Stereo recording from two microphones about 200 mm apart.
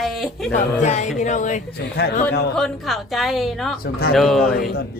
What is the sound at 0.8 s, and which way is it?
Speech, 35° left (ahead or behind).